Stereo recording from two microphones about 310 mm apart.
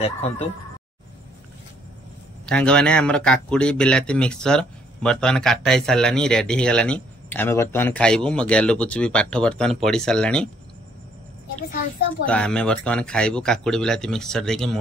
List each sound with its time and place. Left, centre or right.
0.0 s speech: centre
2.4 s speech: centre
12.3 s speech: centre